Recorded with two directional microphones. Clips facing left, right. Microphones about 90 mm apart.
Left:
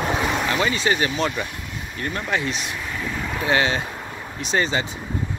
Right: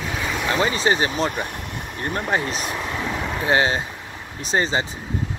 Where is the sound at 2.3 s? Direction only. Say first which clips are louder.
Right 1 dB; 40° right (ahead or behind).